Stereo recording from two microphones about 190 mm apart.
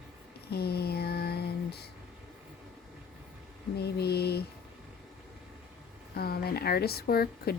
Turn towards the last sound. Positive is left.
turn(degrees=55)  # may be behind; listen again after turning